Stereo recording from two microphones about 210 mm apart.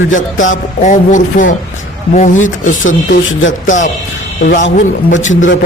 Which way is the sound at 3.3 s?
65° left (ahead or behind).